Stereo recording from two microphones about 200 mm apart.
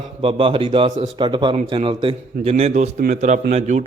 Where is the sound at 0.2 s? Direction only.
25° right (ahead or behind).